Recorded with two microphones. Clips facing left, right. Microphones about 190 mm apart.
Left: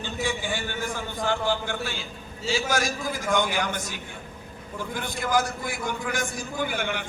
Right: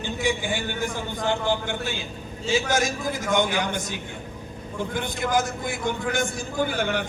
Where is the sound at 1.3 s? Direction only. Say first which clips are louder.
Right 1 dB; 20° right (ahead or behind).